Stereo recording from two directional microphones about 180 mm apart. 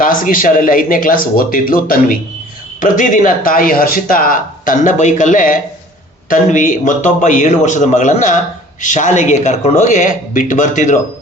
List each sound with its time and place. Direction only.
0.0 s speech: 50° left (ahead or behind)